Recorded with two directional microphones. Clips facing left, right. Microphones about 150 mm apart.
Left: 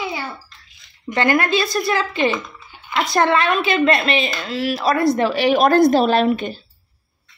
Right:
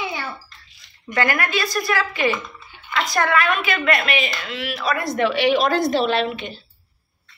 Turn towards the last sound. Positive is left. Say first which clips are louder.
# left 5 dB
turn(degrees=45)  # may be behind; listen again after turning